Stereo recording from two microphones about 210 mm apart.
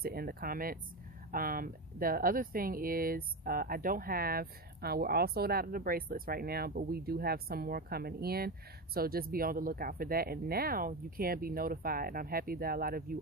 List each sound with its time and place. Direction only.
0.0 s speech: 45° right (ahead or behind)